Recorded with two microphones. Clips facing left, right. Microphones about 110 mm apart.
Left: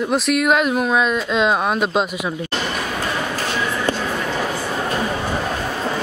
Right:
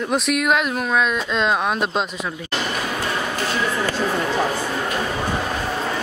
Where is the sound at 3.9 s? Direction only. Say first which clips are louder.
Left 2 dB; 25° left (ahead or behind).